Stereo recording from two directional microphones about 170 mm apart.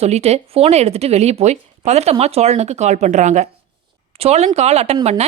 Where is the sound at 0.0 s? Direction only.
40° right (ahead or behind).